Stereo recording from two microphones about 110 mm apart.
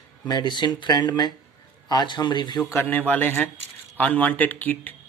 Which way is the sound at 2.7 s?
20° left (ahead or behind).